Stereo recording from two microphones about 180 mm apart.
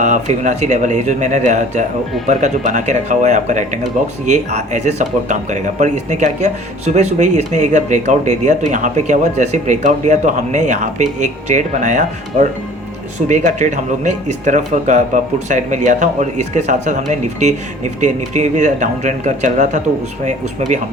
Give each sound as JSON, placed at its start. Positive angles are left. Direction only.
{"t": 0.0, "sound": "speech", "side_deg": -40}